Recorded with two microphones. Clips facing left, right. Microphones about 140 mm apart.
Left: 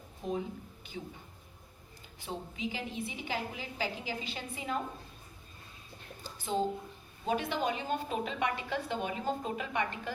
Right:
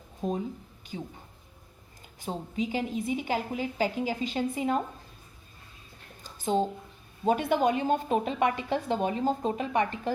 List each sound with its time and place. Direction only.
0.2 s speech: 35° right (ahead or behind)
2.2 s a woman's voice: 40° right (ahead or behind)
6.2 s a sound: 40° right (ahead or behind)
7.3 s a woman's voice: 50° right (ahead or behind)